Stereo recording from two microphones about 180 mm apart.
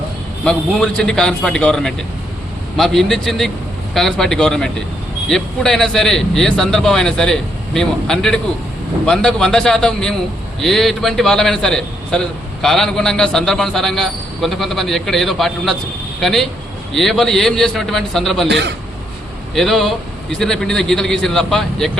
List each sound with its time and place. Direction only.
0.4 s a man's voice: 5° left (ahead or behind)
18.4 s a man's voice: 70° right (ahead or behind)
19.5 s a man's voice: centre (ahead or behind)